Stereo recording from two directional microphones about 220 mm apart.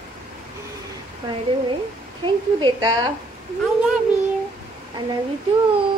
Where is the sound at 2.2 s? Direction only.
20° right (ahead or behind).